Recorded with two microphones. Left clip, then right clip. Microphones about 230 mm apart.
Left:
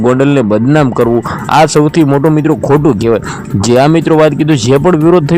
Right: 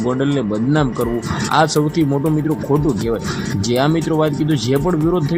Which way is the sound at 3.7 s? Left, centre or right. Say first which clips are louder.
Left 10 dB; left.